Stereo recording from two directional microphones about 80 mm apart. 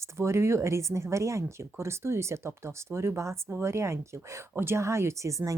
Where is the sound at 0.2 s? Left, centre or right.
Right.